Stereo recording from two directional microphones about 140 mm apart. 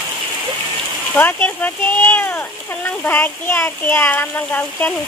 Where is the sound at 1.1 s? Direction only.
15° left (ahead or behind).